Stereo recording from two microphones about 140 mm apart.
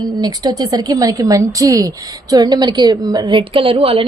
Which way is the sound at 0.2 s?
25° right (ahead or behind).